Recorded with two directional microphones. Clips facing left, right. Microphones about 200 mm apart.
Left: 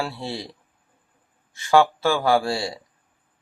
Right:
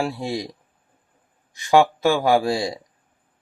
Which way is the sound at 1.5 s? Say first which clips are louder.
Right 1 dB; 15° right (ahead or behind).